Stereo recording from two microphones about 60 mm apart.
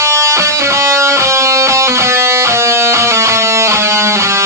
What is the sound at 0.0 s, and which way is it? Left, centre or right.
Music, right.